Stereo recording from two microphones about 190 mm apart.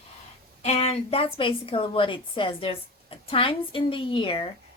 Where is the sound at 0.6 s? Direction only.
35° left (ahead or behind).